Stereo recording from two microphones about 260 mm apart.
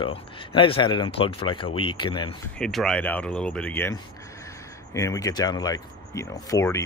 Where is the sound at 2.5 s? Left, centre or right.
Centre.